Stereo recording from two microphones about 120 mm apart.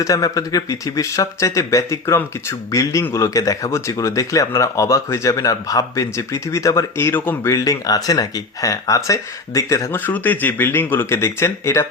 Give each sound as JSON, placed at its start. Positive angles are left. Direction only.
{"t": 0.0, "sound": "speech", "side_deg": 30}
{"t": 7.5, "sound": "speech", "side_deg": 30}